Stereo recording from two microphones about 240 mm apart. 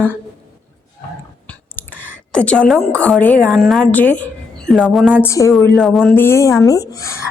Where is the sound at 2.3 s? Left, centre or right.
Centre.